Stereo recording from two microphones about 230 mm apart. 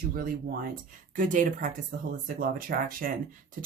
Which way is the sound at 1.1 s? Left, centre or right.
Right.